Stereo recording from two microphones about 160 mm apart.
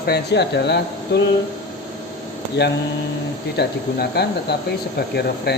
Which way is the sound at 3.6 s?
90° left.